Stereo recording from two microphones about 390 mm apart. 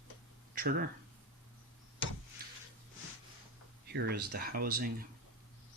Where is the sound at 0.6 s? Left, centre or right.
Right.